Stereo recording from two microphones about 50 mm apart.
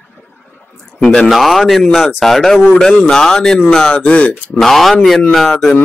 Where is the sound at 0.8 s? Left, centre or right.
Centre.